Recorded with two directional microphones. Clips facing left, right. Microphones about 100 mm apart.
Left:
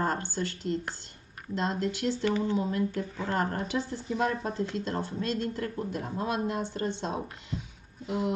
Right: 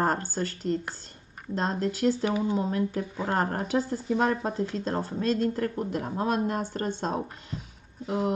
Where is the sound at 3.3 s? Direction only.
40° right (ahead or behind).